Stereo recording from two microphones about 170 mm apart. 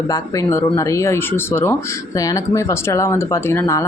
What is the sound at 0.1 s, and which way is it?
Speech, 20° left (ahead or behind).